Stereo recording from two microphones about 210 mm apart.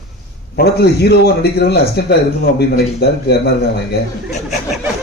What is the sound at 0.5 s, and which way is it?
Speech, 50° left (ahead or behind).